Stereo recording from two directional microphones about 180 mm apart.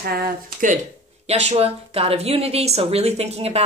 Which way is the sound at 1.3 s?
35° right (ahead or behind).